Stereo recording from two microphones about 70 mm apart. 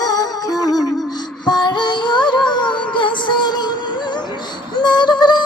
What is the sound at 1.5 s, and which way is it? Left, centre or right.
Music, left.